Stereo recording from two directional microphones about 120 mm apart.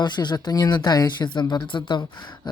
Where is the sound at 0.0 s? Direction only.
40° left (ahead or behind).